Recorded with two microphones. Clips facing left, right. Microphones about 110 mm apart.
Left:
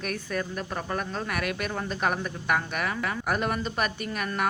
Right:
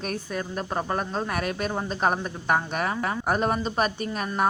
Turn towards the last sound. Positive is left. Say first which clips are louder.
# right 3 dB
turn(degrees=-30)  # may be behind; listen again after turning